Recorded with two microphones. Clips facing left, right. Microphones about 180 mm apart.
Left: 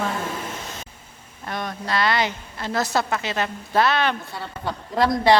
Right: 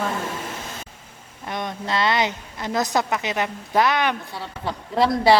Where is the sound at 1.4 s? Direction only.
20° right (ahead or behind).